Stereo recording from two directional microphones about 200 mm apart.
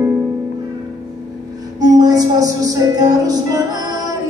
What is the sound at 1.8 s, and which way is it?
Music, 20° right (ahead or behind).